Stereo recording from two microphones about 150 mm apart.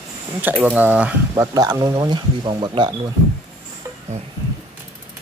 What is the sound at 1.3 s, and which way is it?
Speech, 25° right (ahead or behind).